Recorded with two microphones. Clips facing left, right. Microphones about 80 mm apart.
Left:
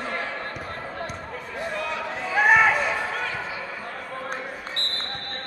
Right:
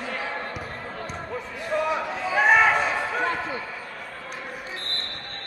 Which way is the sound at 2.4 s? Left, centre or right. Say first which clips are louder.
Even; centre.